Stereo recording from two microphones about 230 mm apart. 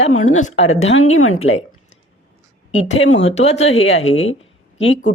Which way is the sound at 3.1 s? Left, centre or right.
Left.